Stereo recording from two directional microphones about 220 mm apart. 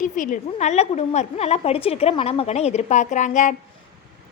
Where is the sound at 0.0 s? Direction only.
35° left (ahead or behind).